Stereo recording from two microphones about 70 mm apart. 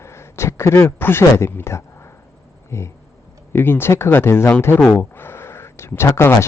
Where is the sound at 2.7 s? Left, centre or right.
Left.